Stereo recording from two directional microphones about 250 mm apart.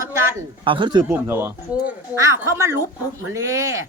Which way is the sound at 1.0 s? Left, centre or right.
Centre.